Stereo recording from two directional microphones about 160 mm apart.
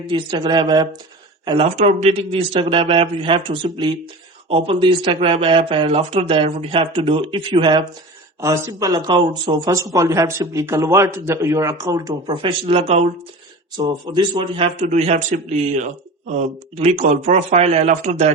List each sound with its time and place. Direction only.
0.1 s speech: 30° right (ahead or behind)
1.5 s speech: 40° right (ahead or behind)
8.4 s speech: 20° right (ahead or behind)
12.3 s a man's voice: 35° right (ahead or behind)